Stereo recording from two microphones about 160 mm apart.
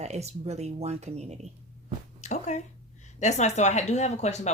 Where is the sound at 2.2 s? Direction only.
45° left (ahead or behind).